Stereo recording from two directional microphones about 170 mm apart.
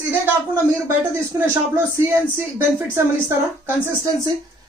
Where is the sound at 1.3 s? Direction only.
15° right (ahead or behind).